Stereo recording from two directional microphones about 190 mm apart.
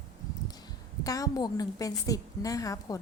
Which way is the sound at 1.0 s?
20° left (ahead or behind).